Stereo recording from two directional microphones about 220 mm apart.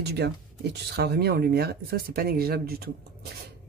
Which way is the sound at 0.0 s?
50° right (ahead or behind).